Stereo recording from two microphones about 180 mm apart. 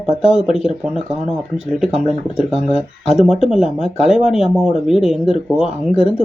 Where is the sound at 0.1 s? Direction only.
35° left (ahead or behind).